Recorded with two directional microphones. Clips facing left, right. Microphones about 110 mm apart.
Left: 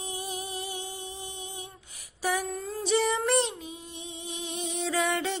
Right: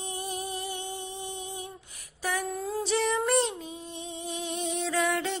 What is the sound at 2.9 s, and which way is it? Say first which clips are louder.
Child singing: left 1 dB; centre (ahead or behind).